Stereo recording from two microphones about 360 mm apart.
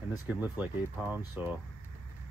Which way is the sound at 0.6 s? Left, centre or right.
Centre.